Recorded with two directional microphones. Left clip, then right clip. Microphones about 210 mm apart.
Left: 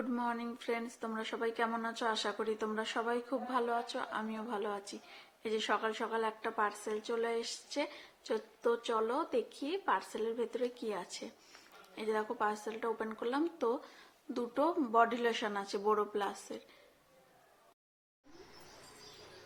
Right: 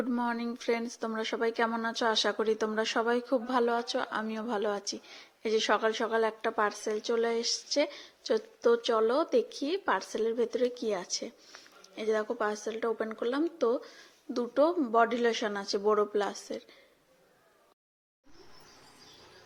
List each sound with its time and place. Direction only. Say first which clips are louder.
0.0 s a woman's voice: right 5 dB; 25° right (ahead or behind)